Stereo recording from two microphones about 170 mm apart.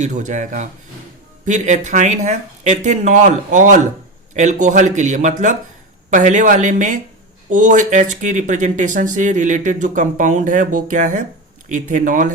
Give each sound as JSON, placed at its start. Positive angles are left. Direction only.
{"t": 0.0, "sound": "speech", "side_deg": -45}